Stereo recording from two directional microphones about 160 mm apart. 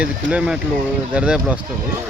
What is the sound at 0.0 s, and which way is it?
Speech, 5° right (ahead or behind).